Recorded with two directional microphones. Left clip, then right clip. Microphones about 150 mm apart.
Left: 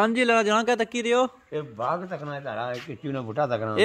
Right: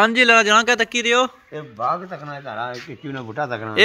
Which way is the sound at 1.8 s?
40° left (ahead or behind).